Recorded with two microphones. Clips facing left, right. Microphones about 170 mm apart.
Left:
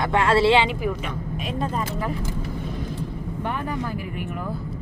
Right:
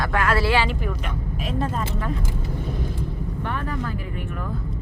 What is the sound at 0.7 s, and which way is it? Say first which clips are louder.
Speech: left 2 dB; 5° left (ahead or behind).